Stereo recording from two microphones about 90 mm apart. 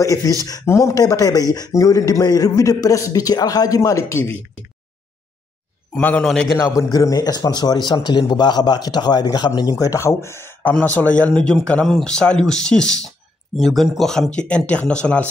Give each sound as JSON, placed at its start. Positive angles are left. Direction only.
{"t": 0.0, "sound": "a man's voice", "side_deg": 40}
{"t": 5.9, "sound": "speech", "side_deg": 15}
{"t": 6.5, "sound": "a man's voice", "side_deg": 35}
{"t": 10.7, "sound": "speech", "side_deg": 15}